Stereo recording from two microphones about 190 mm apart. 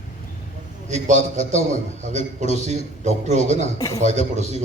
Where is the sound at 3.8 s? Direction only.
15° left (ahead or behind).